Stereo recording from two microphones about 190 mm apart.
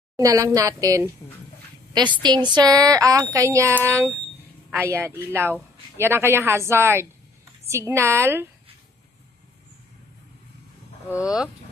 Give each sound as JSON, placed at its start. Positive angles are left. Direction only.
{"t": 0.2, "sound": "speech", "side_deg": -15}
{"t": 2.2, "sound": "speech", "side_deg": -25}
{"t": 11.1, "sound": "speech", "side_deg": -5}